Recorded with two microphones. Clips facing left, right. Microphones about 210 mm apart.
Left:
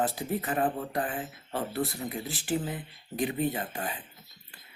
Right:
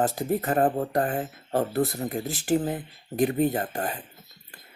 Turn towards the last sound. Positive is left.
turn(degrees=-45)  # may be behind; listen again after turning